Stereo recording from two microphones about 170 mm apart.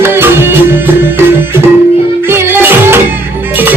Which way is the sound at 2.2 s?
15° right (ahead or behind).